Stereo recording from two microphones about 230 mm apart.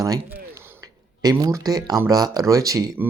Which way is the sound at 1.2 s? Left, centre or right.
Centre.